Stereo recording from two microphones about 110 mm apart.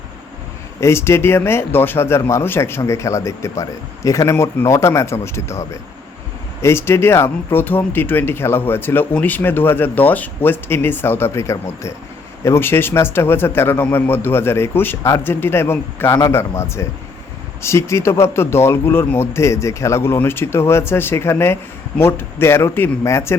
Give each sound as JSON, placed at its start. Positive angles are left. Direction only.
{"t": 0.8, "sound": "speech", "side_deg": 25}